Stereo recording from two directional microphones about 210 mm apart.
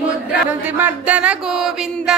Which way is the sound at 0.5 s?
10° right (ahead or behind).